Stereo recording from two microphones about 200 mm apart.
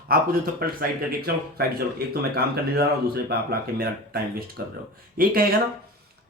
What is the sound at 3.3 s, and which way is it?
Speech, 50° right (ahead or behind).